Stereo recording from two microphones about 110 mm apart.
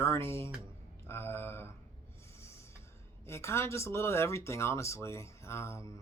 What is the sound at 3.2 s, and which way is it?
Speech, 25° left (ahead or behind).